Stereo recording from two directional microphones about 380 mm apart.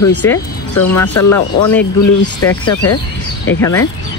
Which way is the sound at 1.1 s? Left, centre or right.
Left.